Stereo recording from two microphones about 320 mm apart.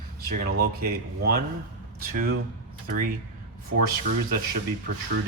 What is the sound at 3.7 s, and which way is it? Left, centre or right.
Speech, right.